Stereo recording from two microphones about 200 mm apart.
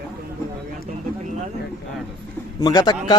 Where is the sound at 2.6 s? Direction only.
20° left (ahead or behind).